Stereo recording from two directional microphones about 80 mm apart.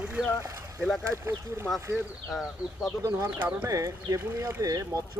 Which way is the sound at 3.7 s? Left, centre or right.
Right.